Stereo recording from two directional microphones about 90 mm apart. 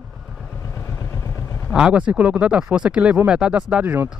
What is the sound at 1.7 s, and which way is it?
Speech, 10° right (ahead or behind).